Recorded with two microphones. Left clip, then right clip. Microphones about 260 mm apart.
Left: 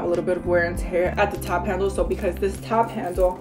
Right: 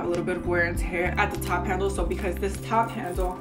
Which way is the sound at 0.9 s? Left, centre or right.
Centre.